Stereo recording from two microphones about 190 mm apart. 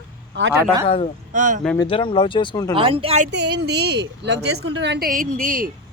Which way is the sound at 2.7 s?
30° right (ahead or behind).